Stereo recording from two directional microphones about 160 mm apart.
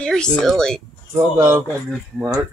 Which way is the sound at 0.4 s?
5° left (ahead or behind).